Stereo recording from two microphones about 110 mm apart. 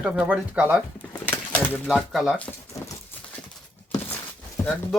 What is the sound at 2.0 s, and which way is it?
Speech, centre (ahead or behind).